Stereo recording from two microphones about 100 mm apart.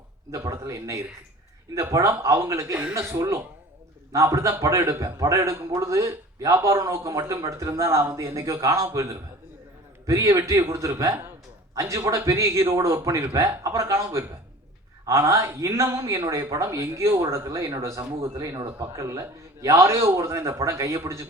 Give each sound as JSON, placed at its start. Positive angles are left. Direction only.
{"t": 0.3, "sound": "a man's voice", "side_deg": -30}